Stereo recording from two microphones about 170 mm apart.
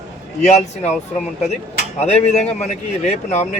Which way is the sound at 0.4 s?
40° left (ahead or behind).